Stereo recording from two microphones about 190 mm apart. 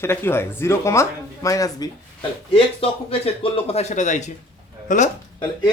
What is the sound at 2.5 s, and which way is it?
Speech, 30° left (ahead or behind).